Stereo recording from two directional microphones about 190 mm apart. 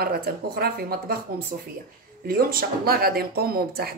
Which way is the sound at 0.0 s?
55° right (ahead or behind).